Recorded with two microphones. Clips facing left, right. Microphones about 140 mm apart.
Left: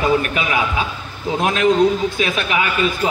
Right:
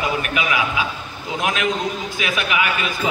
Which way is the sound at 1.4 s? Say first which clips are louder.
Left 4 dB; 30° left (ahead or behind).